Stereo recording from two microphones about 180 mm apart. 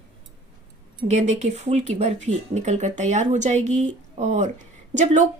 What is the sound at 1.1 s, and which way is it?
A woman's voice, 40° right (ahead or behind).